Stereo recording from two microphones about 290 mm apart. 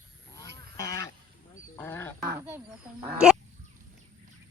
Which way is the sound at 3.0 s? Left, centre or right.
Centre.